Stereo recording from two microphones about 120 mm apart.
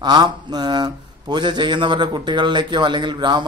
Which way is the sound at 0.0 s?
35° right (ahead or behind).